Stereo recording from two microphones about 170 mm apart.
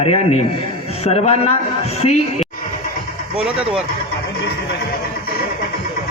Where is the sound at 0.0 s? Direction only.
35° left (ahead or behind).